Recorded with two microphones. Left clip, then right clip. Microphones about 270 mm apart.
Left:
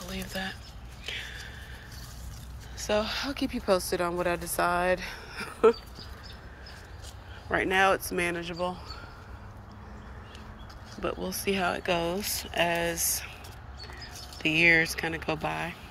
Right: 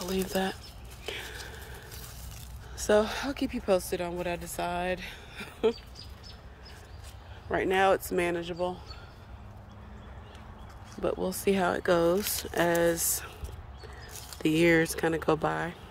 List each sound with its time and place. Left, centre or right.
0.0 s speech: right
1.1 s whispering: right
2.8 s speech: right; by 5.8 s centre
7.4 s speech: centre
11.0 s speech: right
14.4 s speech: right